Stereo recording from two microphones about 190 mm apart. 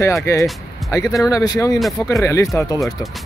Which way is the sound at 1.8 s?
Centre (ahead or behind).